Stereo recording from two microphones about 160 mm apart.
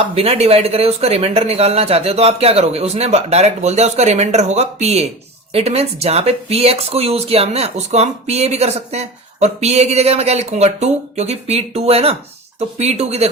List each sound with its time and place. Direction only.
0.2 s speech: 40° right (ahead or behind)